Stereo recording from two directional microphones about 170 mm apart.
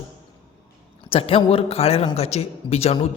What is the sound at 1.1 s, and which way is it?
A man's voice, 35° left (ahead or behind).